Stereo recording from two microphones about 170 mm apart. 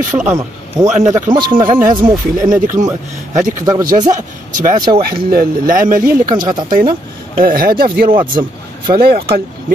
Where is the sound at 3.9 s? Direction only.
50° right (ahead or behind).